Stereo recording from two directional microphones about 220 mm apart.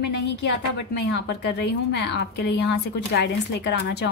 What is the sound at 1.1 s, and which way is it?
A woman's voice, 50° left (ahead or behind).